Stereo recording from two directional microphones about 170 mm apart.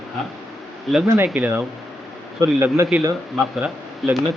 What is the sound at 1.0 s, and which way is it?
A man's voice, 20° right (ahead or behind).